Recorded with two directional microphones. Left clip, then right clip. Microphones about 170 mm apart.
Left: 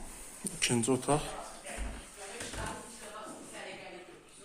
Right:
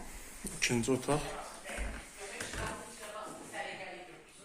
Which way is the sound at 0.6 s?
25° left (ahead or behind).